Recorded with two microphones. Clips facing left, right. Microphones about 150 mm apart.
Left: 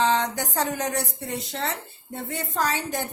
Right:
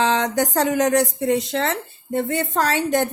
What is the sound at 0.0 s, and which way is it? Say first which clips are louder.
A woman's voice: right 4 dB; 90° right.